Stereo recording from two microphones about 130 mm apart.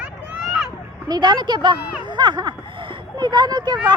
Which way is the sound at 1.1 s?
35° right (ahead or behind).